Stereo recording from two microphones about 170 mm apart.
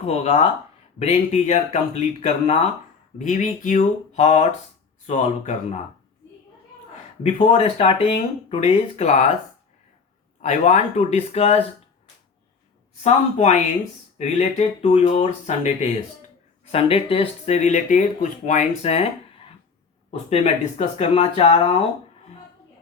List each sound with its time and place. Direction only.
0.0 s speech: 40° left (ahead or behind)
7.2 s speech: 40° left (ahead or behind)
10.4 s speech: 45° left (ahead or behind)
13.0 s speech: 40° left (ahead or behind)